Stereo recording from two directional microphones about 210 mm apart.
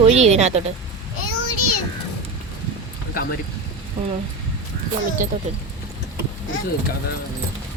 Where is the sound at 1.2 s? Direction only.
90° left.